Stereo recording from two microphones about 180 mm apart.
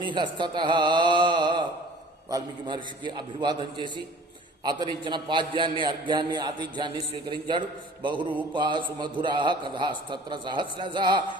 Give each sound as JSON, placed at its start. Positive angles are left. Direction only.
{"t": 0.0, "sound": "a man's voice", "side_deg": -25}